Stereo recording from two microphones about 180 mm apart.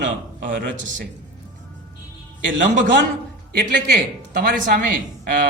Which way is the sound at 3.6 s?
65° right (ahead or behind).